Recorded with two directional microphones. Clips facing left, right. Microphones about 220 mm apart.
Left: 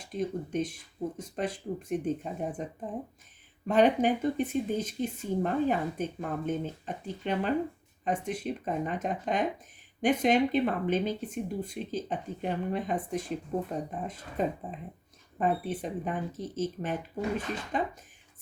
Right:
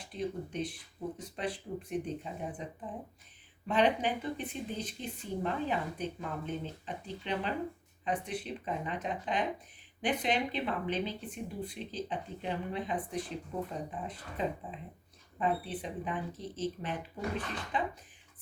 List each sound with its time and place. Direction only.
0.1 s speech: 45° left (ahead or behind)